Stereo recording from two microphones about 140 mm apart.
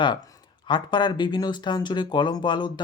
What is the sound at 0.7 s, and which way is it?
Speech, 35° left (ahead or behind).